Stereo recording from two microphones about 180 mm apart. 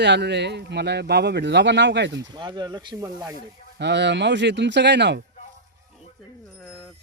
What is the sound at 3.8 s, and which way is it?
Speech, 75° right (ahead or behind).